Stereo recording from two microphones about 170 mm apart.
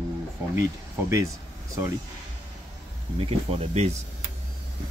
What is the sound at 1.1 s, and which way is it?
Speech, 20° right (ahead or behind).